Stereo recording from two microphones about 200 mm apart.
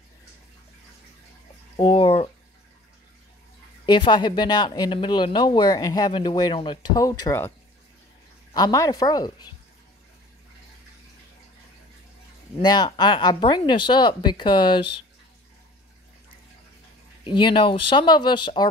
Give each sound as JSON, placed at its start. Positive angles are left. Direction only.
{"t": 1.8, "sound": "speech", "side_deg": 25}
{"t": 3.8, "sound": "speech", "side_deg": 20}
{"t": 8.5, "sound": "speech", "side_deg": 20}
{"t": 12.6, "sound": "speech", "side_deg": 20}
{"t": 17.2, "sound": "speech", "side_deg": 25}